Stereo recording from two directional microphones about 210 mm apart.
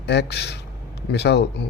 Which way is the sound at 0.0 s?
50° left (ahead or behind).